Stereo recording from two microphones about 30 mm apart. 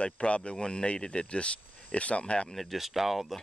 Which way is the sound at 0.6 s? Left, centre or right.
Left.